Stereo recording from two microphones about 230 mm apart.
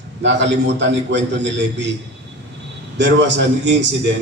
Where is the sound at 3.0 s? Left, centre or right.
Right.